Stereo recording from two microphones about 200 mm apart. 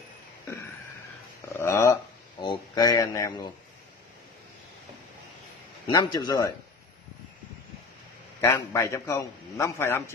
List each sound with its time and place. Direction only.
1.6 s a sound: 15° left (ahead or behind)
5.9 s a man's voice: 20° left (ahead or behind)
8.4 s a man's voice: 15° left (ahead or behind)